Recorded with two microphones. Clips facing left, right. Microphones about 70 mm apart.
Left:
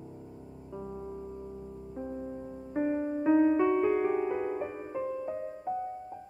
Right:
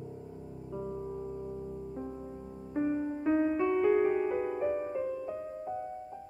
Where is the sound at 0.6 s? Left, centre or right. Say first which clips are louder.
Right 2 dB; centre.